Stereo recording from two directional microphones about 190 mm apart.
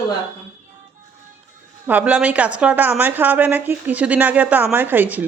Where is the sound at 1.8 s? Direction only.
10° right (ahead or behind).